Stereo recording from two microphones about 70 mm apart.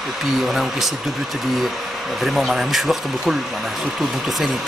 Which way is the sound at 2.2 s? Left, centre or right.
Centre.